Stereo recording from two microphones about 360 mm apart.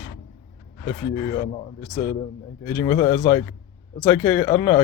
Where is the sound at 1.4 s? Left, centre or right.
Centre.